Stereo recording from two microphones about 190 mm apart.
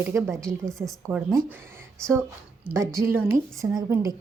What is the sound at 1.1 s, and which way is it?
Speech, 25° right (ahead or behind).